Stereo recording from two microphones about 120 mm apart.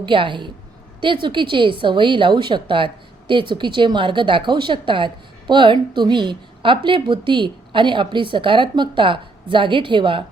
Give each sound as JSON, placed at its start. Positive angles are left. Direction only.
{"t": 0.0, "sound": "a woman's voice", "side_deg": -45}